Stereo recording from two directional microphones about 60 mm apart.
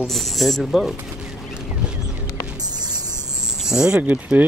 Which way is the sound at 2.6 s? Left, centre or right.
Right.